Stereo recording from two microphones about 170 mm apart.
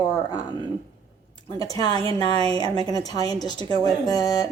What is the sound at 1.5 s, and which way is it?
Speech, 20° left (ahead or behind).